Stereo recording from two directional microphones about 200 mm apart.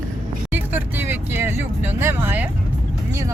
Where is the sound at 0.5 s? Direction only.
10° right (ahead or behind).